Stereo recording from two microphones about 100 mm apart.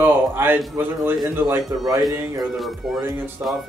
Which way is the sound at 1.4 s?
35° right (ahead or behind).